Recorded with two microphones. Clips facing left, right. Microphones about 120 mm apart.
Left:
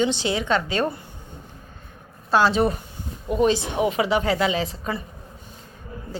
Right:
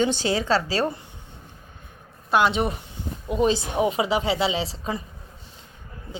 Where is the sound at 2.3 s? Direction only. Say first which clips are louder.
Left 2 dB; 20° right (ahead or behind).